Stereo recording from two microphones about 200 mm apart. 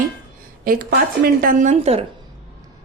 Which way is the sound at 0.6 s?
45° right (ahead or behind).